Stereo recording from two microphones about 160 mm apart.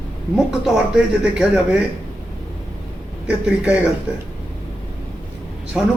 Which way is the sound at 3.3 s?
5° right (ahead or behind).